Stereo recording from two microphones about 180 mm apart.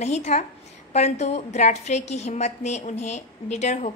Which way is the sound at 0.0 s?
40° left (ahead or behind).